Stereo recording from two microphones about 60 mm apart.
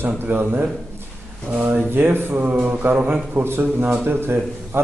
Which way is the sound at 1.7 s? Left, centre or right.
Right.